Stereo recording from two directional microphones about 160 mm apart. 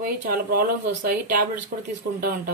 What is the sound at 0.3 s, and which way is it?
Speech, 65° right (ahead or behind).